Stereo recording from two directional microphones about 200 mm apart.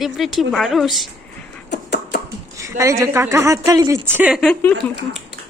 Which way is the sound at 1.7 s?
60° left (ahead or behind).